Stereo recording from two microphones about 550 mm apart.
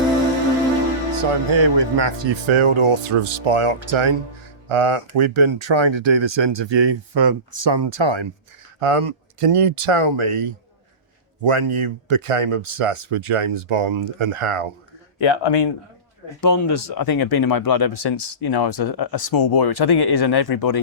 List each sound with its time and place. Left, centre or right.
1.1 s speech: right
8.8 s speech: right
15.2 s speech: left
16.4 s speech: left